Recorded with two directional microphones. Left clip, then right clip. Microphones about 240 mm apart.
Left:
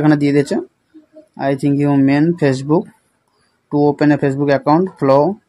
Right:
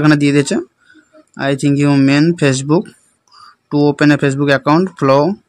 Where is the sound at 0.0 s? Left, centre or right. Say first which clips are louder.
Right 2 dB; right.